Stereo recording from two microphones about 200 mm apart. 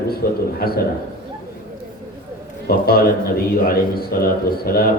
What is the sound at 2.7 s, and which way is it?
A man's voice, 50° left (ahead or behind).